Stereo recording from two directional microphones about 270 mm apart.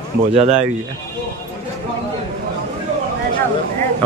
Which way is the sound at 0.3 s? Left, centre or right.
Right.